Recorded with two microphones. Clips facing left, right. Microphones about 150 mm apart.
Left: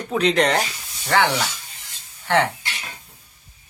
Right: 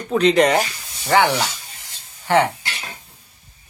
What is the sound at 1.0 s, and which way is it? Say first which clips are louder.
Speech: right 3 dB; 15° right (ahead or behind).